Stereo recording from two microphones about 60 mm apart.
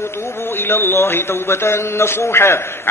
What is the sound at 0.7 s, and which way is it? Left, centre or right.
Speech, left.